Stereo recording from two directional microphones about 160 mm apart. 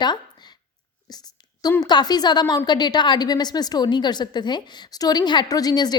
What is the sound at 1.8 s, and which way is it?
A woman's voice, 25° left (ahead or behind).